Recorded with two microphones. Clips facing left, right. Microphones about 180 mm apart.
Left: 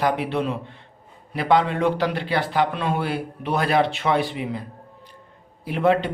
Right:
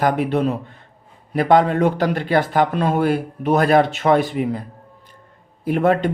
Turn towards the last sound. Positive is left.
turn(degrees=-50)  # may be behind; listen again after turning